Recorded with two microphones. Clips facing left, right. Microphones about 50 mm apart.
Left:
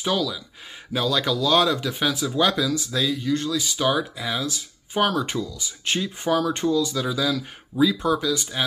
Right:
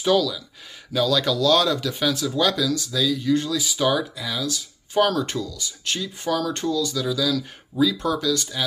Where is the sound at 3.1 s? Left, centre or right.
Centre.